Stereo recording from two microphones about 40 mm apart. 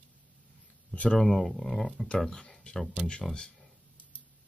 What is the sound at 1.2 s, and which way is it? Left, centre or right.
Speech, centre.